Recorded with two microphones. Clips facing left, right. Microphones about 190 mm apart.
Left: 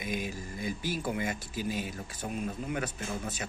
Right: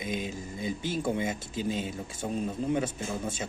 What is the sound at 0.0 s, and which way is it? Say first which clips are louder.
Speech: right 2 dB; 25° right (ahead or behind).